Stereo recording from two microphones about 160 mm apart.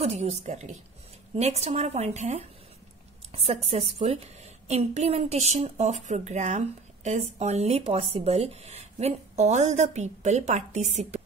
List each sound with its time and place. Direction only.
0.0 s a woman's voice: 40° right (ahead or behind)